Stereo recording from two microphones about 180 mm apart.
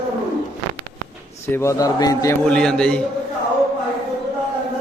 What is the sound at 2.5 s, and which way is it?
Speech, 5° left (ahead or behind).